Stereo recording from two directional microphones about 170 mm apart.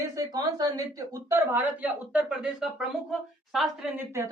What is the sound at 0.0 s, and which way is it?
A woman's voice, 20° right (ahead or behind).